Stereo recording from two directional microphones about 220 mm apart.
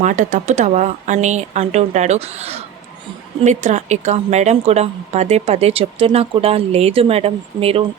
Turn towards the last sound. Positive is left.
turn(degrees=-25)  # may be behind; listen again after turning